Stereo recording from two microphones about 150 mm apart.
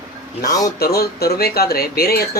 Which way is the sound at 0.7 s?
90° left.